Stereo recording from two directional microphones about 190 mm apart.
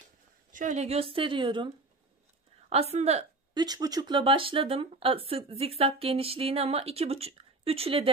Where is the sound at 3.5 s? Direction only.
20° right (ahead or behind).